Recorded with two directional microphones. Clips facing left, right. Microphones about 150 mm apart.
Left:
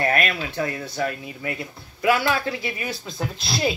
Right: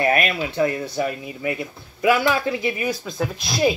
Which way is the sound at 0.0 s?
20° right (ahead or behind).